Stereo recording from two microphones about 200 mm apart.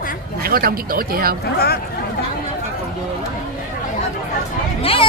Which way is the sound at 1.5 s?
50° left (ahead or behind).